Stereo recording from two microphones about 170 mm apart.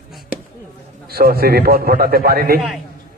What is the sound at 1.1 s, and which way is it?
A man's voice, 65° right (ahead or behind).